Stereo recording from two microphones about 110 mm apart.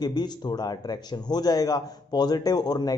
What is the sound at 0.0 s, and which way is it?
A man's voice, 40° left (ahead or behind).